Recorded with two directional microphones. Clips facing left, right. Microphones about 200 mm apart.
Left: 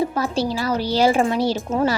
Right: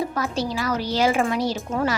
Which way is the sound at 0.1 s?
30° left (ahead or behind).